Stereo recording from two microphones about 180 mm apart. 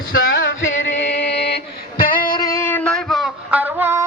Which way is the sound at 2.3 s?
20° left (ahead or behind).